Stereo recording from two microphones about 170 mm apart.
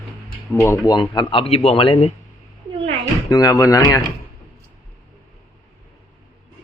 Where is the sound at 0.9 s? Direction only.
25° left (ahead or behind).